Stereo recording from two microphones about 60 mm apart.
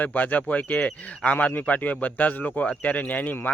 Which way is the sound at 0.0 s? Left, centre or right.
Left.